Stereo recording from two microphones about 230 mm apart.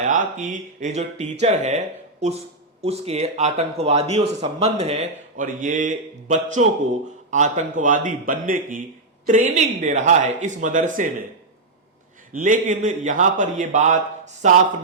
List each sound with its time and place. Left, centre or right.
0.0 s speech: right
2.8 s speech: right
12.3 s speech: right